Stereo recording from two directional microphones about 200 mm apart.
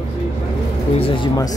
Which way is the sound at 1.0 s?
20° left (ahead or behind).